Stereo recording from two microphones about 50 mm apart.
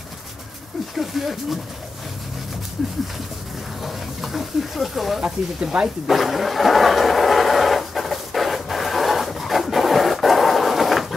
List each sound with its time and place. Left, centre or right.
0.9 s speech: centre
3.8 s speech: centre
5.2 s speech: centre
6.0 s a sound: centre